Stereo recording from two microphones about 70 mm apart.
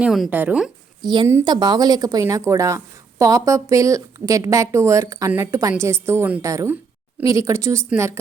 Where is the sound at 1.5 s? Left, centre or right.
Right.